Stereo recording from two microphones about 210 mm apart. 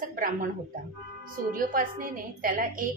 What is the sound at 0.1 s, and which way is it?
A woman's voice, 40° right (ahead or behind).